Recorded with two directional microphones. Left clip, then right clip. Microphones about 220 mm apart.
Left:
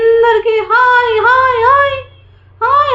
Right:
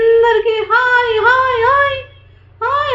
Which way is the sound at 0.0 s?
15° left (ahead or behind).